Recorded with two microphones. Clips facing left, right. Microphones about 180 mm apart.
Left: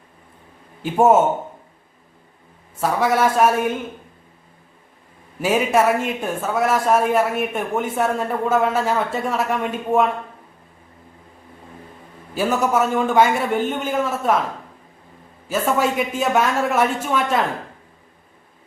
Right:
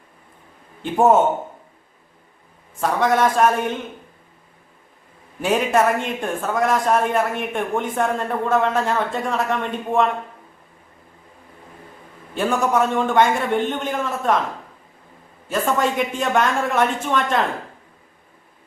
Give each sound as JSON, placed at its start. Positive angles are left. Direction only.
{"t": 0.8, "sound": "speech", "side_deg": 10}
{"t": 2.8, "sound": "speech", "side_deg": 5}
{"t": 5.4, "sound": "speech", "side_deg": 5}
{"t": 12.3, "sound": "speech", "side_deg": 5}
{"t": 15.4, "sound": "speech", "side_deg": 5}